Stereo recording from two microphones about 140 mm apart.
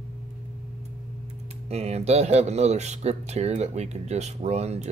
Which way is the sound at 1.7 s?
50° right (ahead or behind).